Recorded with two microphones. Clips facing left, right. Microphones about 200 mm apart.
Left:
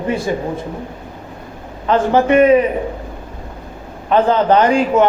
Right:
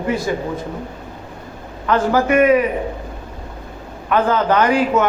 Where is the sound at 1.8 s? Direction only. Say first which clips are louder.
Left 3 dB; 25° left (ahead or behind).